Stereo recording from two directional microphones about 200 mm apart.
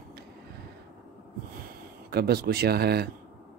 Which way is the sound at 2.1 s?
55° right (ahead or behind).